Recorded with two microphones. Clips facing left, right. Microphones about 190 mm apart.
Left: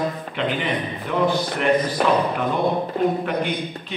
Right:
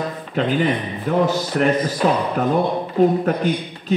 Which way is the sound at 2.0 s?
60° left (ahead or behind).